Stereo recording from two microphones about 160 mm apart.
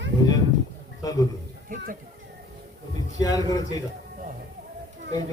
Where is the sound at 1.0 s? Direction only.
20° left (ahead or behind).